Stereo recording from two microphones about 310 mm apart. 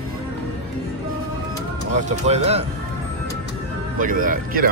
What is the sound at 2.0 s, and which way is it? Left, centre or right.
Speech, right.